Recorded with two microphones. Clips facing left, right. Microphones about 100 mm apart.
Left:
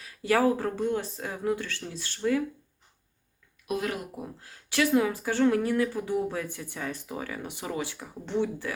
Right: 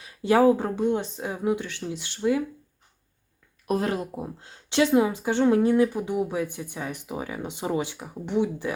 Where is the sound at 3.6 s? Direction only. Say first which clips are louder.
Right 5 dB; 35° right (ahead or behind).